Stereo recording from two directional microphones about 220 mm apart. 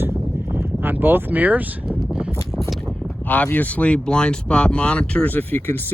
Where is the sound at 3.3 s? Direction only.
5° left (ahead or behind).